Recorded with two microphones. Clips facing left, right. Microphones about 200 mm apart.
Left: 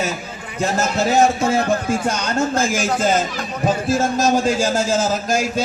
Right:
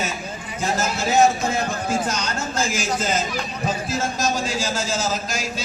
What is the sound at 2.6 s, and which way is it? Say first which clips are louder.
Speech: left 5 dB; 55° left (ahead or behind).